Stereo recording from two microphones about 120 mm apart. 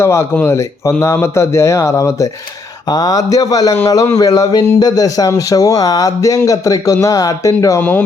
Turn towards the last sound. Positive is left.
turn(degrees=30)  # may be behind; listen again after turning